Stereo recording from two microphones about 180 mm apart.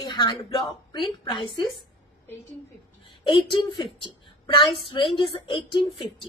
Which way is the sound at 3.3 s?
25° left (ahead or behind).